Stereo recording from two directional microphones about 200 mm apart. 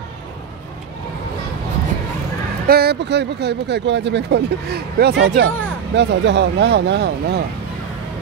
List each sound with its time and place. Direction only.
2.6 s speech: 50° right (ahead or behind)